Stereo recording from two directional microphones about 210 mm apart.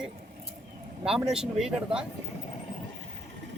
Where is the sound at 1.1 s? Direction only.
5° right (ahead or behind).